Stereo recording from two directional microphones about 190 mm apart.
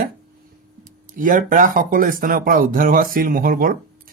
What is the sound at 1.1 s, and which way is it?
Speech, 45° right (ahead or behind).